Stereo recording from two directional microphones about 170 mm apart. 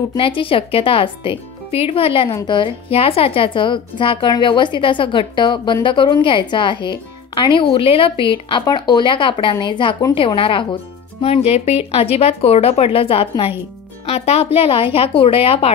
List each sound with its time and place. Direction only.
0.1 s a woman's voice: 30° left (ahead or behind)